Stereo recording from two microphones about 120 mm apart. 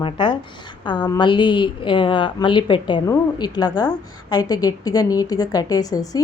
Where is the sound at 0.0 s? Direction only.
40° left (ahead or behind).